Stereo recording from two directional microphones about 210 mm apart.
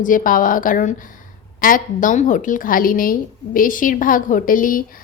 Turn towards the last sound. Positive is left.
turn(degrees=40)  # may be behind; listen again after turning